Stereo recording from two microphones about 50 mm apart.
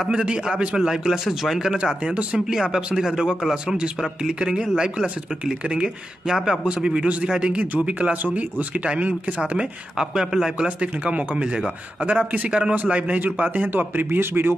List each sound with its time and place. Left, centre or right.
0.1 s speech: centre
0.7 s speech: centre
6.3 s speech: centre
6.7 s speech: centre
9.9 s speech: centre
10.8 s speech: right